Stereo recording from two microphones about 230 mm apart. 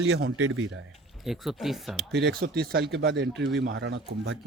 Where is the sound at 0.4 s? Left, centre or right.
Right.